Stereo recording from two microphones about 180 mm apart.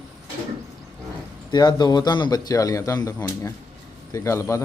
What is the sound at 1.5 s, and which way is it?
Speech, 25° left (ahead or behind).